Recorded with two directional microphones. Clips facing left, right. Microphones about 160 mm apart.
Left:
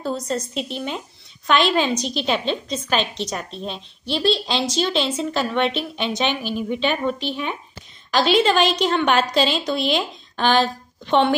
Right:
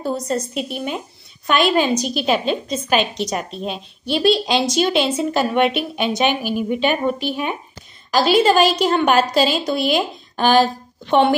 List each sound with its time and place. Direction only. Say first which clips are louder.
0.0 s a woman's voice: right 3 dB; 10° right (ahead or behind)